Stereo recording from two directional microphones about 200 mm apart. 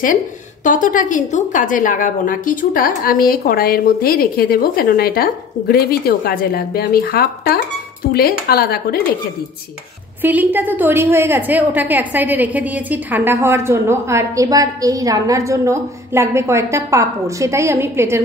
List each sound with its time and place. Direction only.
0.7 s a woman's voice: 40° left (ahead or behind)
10.2 s a woman's voice: 10° right (ahead or behind)